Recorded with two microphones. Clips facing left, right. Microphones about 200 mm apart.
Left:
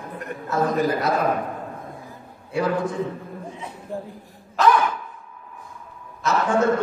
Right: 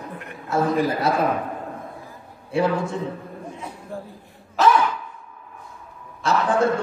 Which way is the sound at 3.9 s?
15° left (ahead or behind).